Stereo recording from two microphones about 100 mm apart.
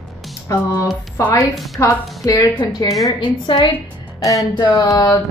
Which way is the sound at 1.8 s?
35° left (ahead or behind).